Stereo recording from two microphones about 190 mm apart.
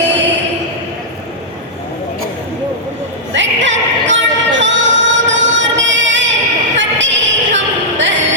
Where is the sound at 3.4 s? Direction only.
75° right (ahead or behind).